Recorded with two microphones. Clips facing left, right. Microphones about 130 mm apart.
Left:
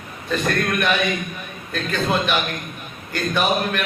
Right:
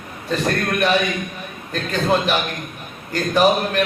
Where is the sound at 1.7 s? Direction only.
35° right (ahead or behind).